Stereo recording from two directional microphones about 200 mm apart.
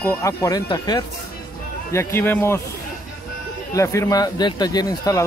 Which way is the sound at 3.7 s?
15° left (ahead or behind).